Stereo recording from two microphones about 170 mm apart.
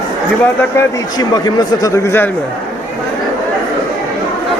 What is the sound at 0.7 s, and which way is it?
A man's voice, 25° left (ahead or behind).